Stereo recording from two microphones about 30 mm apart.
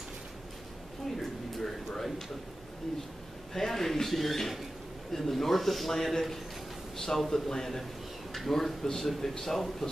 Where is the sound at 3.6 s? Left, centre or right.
Centre.